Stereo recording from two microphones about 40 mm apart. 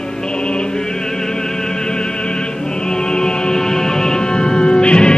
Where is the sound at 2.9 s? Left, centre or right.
Centre.